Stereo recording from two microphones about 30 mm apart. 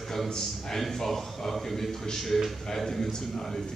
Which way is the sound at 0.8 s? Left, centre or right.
Centre.